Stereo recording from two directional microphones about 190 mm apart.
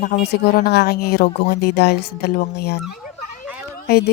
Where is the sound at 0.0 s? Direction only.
55° left (ahead or behind).